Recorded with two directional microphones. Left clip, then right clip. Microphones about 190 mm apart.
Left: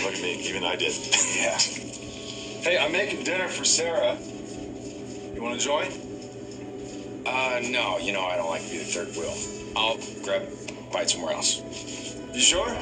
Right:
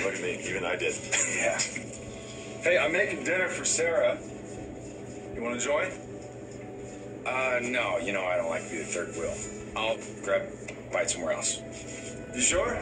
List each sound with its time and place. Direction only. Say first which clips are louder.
0.0 s a man's voice: left 2 dB; 30° left (ahead or behind)
5.4 s a man's voice: left 2 dB; 30° left (ahead or behind)
7.2 s a man's voice: left 2 dB; 30° left (ahead or behind)
11.0 s a man's voice: left 2 dB; 30° left (ahead or behind)